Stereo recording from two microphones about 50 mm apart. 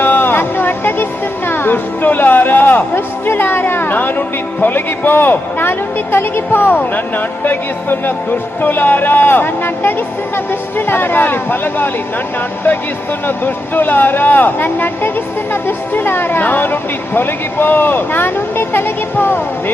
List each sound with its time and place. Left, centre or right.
0.0 s a sound: left
1.5 s a woman's voice: left
13.2 s a woman's voice: left